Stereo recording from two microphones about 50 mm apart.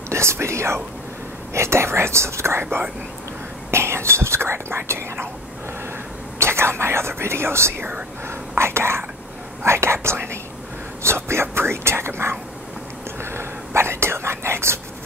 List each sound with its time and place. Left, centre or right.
0.1 s speech: right
3.7 s speech: right
6.3 s speech: right
8.3 s whispering: right
11.1 s speech: right
13.2 s whispering: right